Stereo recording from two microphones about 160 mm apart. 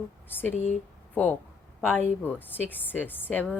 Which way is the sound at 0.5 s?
45° left (ahead or behind).